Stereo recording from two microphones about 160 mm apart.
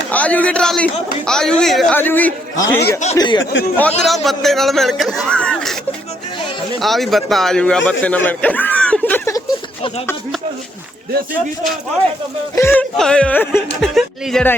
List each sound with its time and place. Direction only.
0.1 s a man's voice: 10° left (ahead or behind)
3.2 s speech: 30° left (ahead or behind)
3.8 s a man's voice: 5° left (ahead or behind)
6.7 s a man's voice: centre (ahead or behind)
12.5 s speech: 15° left (ahead or behind)
13.9 s a man's voice: centre (ahead or behind)